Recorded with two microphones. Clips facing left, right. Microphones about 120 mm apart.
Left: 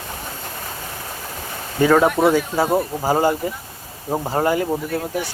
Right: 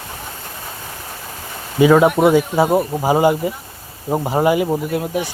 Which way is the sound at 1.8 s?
10° right (ahead or behind).